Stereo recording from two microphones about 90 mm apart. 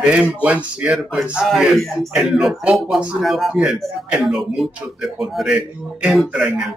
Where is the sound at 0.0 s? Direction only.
10° right (ahead or behind).